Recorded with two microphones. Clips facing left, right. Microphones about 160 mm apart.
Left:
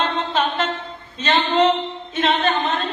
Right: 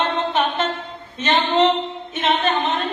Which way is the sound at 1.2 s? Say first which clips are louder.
Even; 20° right (ahead or behind).